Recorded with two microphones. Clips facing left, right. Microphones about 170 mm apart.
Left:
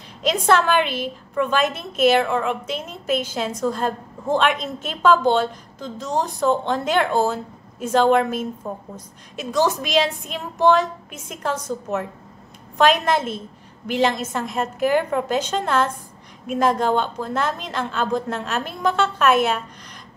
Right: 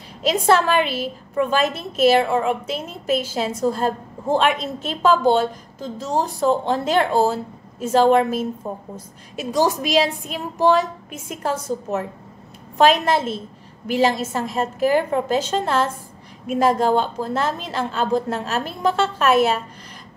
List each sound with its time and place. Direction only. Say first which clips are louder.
0.2 s a woman's voice: right 1 dB; 5° right (ahead or behind)
16.9 s speech: right 2 dB; 35° right (ahead or behind)
17.3 s a woman's voice: right 1 dB; 5° right (ahead or behind)